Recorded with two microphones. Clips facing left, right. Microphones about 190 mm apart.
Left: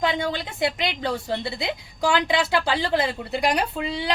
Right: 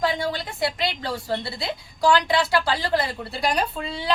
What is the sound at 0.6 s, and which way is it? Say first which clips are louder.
A woman's voice: left 1 dB; 20° left (ahead or behind).